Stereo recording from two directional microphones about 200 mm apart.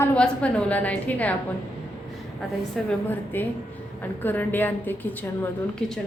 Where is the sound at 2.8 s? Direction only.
Centre (ahead or behind).